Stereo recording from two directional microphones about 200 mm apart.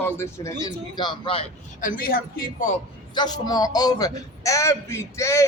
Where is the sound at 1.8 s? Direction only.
45° left (ahead or behind).